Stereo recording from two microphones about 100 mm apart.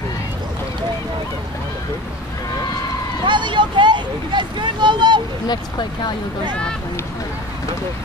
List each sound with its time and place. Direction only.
3.3 s speech: 50° right (ahead or behind)
5.5 s speech: 45° left (ahead or behind)